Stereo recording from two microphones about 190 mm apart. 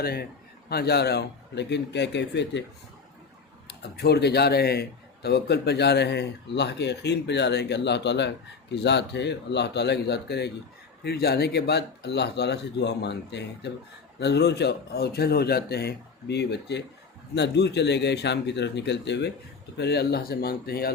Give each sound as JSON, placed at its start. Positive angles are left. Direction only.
{"t": 0.0, "sound": "a man's voice", "side_deg": 55}
{"t": 3.7, "sound": "a man's voice", "side_deg": 60}